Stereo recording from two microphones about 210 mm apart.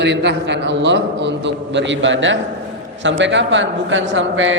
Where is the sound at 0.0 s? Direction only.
55° right (ahead or behind).